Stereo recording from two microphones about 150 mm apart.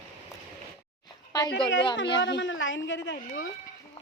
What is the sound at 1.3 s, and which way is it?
Speech, 25° left (ahead or behind).